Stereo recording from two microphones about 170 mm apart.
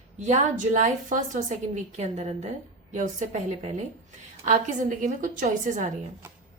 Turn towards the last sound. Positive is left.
turn(degrees=-45)  # may be behind; listen again after turning